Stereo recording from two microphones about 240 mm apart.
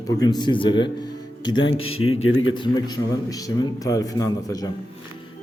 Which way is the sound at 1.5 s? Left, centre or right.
Left.